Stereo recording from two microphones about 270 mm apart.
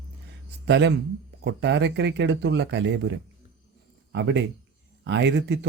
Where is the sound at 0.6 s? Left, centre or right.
Right.